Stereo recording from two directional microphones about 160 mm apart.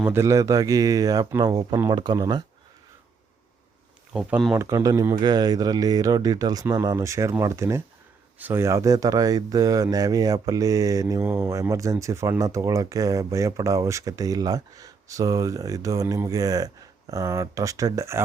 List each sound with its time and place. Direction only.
0.0 s speech: 15° right (ahead or behind)
4.1 s speech: 5° right (ahead or behind)
4.5 s speech: 20° right (ahead or behind)